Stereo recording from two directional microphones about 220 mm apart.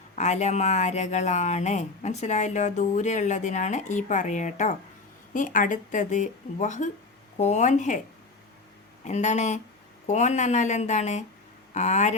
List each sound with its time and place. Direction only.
0.2 s speech: 30° left (ahead or behind)
9.0 s speech: 30° left (ahead or behind)